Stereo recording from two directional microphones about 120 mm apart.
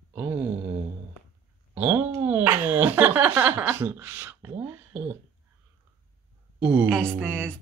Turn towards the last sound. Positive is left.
turn(degrees=-15)  # may be behind; listen again after turning